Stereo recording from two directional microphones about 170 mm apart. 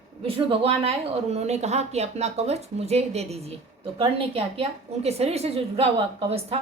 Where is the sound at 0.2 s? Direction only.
35° right (ahead or behind).